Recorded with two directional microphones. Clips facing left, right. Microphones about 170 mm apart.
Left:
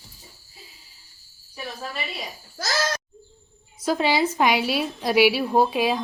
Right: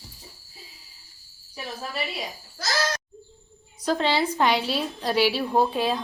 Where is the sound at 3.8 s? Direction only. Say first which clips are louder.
Left 2 dB; 10° left (ahead or behind).